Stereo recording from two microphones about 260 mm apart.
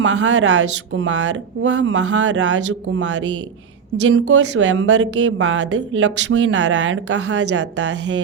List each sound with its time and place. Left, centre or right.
0.0 s speech: right